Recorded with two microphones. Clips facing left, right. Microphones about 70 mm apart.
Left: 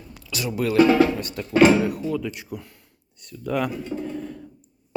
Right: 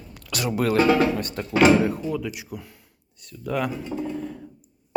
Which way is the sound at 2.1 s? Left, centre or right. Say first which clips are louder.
Left 1 dB; centre.